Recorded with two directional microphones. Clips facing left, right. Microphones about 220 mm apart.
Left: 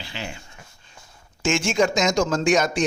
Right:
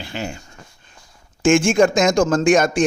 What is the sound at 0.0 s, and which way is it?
A man's voice, 50° right (ahead or behind).